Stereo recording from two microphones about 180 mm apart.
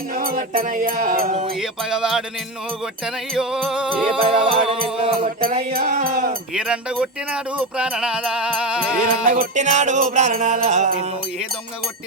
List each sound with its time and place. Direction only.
0.1 s music: 55° right (ahead or behind)
1.5 s music: 5° right (ahead or behind)
3.3 s music: 5° right (ahead or behind)
4.2 s music: 30° right (ahead or behind)
5.4 s music: 55° right (ahead or behind)
6.5 s music: 5° right (ahead or behind)
9.0 s music: 50° right (ahead or behind)